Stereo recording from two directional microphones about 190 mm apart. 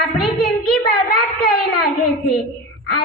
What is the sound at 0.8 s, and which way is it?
Speech, 55° left (ahead or behind).